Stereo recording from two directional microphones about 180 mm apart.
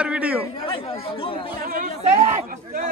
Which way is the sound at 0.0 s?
5° right (ahead or behind).